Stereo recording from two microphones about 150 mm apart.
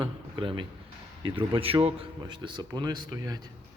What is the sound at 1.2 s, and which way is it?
Speech, 35° right (ahead or behind).